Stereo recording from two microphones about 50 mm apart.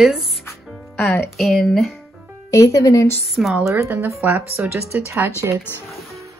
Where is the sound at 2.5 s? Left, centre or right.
Left.